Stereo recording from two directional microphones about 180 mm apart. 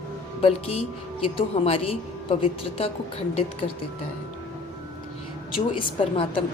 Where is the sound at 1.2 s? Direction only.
30° left (ahead or behind).